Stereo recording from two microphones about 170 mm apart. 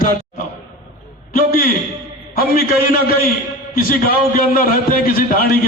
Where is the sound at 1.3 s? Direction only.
60° left (ahead or behind).